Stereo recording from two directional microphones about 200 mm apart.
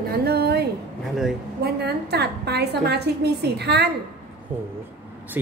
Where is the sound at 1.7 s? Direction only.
55° right (ahead or behind).